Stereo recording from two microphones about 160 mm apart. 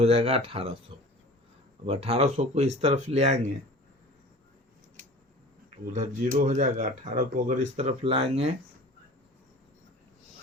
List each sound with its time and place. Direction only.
0.0 s speech: 40° right (ahead or behind)
1.8 s speech: 40° right (ahead or behind)
5.9 s speech: 50° right (ahead or behind)